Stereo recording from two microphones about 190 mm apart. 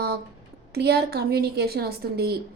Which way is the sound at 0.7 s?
55° right (ahead or behind).